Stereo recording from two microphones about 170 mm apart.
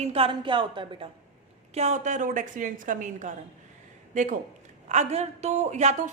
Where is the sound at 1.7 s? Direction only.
40° right (ahead or behind).